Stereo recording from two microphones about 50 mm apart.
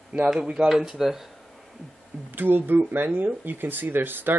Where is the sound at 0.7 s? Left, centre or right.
Centre.